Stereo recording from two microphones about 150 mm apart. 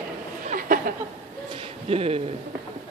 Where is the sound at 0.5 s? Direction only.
70° right (ahead or behind).